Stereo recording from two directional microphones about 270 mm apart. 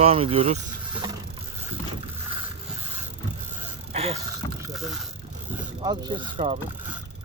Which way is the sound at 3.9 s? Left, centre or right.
Right.